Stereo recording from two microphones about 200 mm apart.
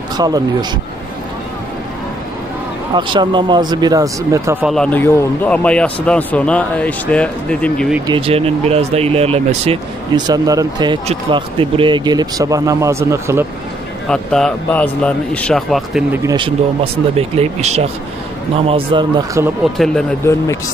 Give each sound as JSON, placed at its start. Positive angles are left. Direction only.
{"t": 0.2, "sound": "speech", "side_deg": -20}
{"t": 2.9, "sound": "speech", "side_deg": -25}
{"t": 4.6, "sound": "a man's voice", "side_deg": 5}
{"t": 8.1, "sound": "speech", "side_deg": -30}
{"t": 14.0, "sound": "speech", "side_deg": 5}
{"t": 16.1, "sound": "speech", "side_deg": -20}
{"t": 17.2, "sound": "speech", "side_deg": -30}
{"t": 18.7, "sound": "speech", "side_deg": -20}
{"t": 19.8, "sound": "speech", "side_deg": 5}